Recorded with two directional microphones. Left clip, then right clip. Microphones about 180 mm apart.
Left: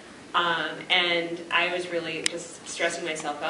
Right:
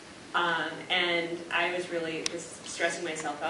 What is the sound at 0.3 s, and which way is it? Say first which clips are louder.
Speech: left 3 dB; 15° left (ahead or behind).